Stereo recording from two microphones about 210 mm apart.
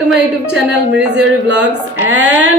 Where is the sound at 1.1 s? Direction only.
55° right (ahead or behind).